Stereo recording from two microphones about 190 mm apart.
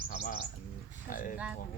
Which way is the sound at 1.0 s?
45° left (ahead or behind).